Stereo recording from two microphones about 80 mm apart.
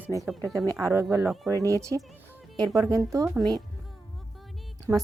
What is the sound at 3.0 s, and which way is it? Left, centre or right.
Speech, right.